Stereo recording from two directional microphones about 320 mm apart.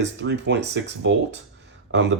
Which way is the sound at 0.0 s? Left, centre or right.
Right.